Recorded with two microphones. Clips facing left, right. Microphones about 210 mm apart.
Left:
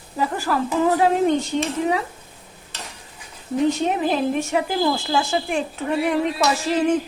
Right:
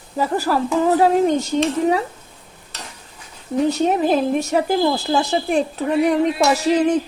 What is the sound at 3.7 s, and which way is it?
Speech, 40° right (ahead or behind).